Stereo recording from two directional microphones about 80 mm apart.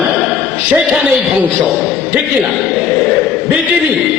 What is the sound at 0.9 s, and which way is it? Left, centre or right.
Speech, centre.